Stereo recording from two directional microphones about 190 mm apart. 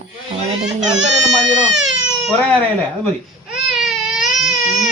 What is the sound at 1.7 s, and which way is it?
Baby cry, 75° right (ahead or behind).